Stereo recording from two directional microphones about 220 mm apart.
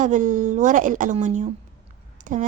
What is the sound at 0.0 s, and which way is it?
A woman's voice, 35° right (ahead or behind).